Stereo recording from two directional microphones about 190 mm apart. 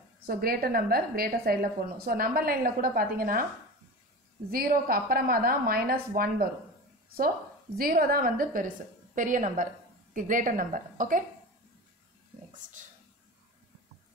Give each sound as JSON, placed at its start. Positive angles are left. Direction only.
{"t": 0.2, "sound": "a woman's voice", "side_deg": -50}
{"t": 4.5, "sound": "a woman's voice", "side_deg": -50}